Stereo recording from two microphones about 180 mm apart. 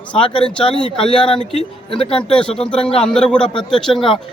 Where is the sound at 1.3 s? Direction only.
30° left (ahead or behind).